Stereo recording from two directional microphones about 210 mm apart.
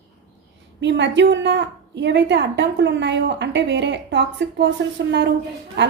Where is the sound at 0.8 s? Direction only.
55° right (ahead or behind).